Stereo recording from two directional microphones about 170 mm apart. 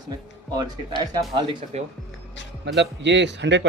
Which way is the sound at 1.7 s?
40° right (ahead or behind).